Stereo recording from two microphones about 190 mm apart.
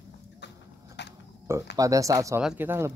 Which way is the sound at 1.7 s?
15° right (ahead or behind).